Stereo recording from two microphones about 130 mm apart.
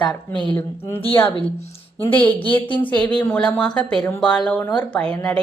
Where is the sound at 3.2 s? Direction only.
10° left (ahead or behind).